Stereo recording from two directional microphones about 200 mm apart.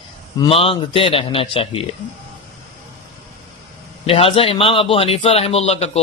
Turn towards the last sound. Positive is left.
turn(degrees=30)  # may be behind; listen again after turning